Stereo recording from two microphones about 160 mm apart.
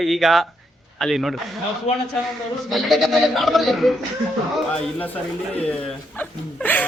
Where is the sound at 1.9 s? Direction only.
45° left (ahead or behind).